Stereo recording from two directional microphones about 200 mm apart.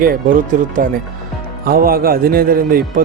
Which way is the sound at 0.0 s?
45° right (ahead or behind).